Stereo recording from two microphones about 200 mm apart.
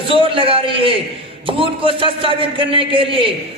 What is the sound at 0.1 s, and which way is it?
A man's voice, 25° right (ahead or behind).